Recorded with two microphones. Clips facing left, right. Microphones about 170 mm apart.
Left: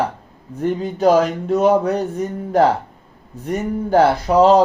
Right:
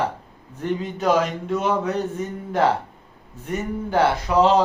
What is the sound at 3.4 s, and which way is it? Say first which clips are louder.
Speech: left 5 dB; 40° left (ahead or behind).